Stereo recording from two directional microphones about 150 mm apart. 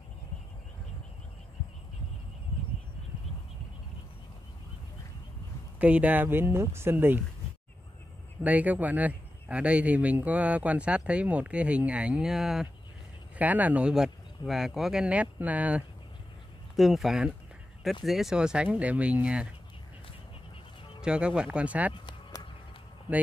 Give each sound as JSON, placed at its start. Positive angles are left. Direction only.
{"t": 5.8, "sound": "speech", "side_deg": -10}
{"t": 8.5, "sound": "speech", "side_deg": -10}
{"t": 21.0, "sound": "speech", "side_deg": -5}
{"t": 21.9, "sound": "run", "side_deg": 30}